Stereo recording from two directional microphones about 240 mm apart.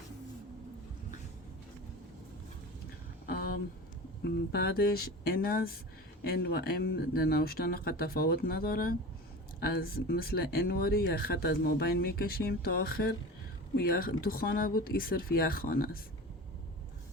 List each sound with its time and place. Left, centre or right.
4.2 s speech: left